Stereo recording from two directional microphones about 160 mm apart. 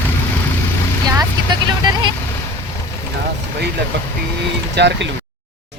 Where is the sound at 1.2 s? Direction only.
25° right (ahead or behind).